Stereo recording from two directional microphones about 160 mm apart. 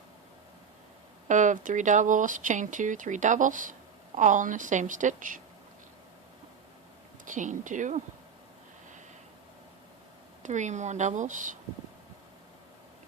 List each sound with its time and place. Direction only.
1.3 s speech: 50° right (ahead or behind)
7.3 s speech: 50° right (ahead or behind)
10.4 s speech: 50° right (ahead or behind)